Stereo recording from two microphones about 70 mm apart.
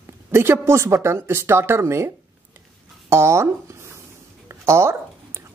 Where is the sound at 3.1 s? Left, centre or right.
Right.